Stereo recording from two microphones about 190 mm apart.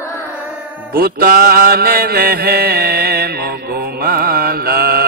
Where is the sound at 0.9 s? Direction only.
50° right (ahead or behind).